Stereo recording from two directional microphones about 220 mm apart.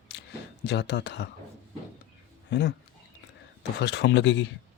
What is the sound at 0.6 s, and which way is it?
Speech, 50° left (ahead or behind).